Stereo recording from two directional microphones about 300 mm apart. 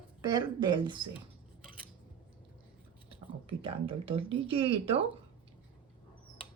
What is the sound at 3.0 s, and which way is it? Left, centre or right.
Speech, centre.